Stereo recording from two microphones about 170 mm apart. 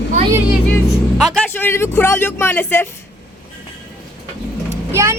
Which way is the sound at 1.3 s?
10° left (ahead or behind).